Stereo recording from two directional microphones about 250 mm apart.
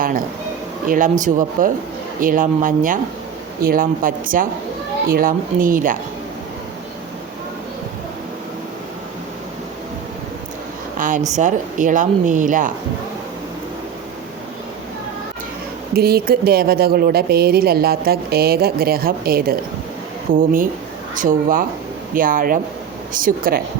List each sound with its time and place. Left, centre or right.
0.9 s speech: right
10.9 s a sound: right
11.3 s speech: right
16.0 s speech: right